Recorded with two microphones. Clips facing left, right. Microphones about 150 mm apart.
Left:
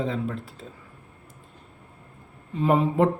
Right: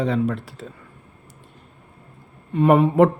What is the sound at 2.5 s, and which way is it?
Speech, 65° right (ahead or behind).